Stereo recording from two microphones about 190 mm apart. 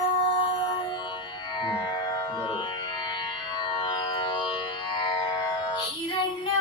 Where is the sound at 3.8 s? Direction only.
25° left (ahead or behind).